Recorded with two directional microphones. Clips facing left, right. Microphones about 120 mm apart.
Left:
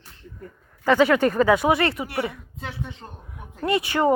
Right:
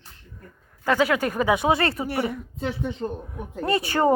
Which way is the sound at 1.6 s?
25° right (ahead or behind).